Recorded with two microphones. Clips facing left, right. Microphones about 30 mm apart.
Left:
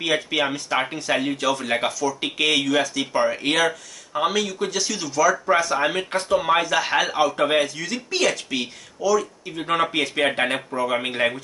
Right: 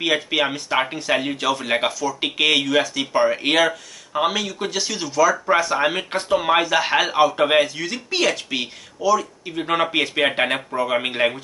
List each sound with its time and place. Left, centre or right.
0.0 s speech: centre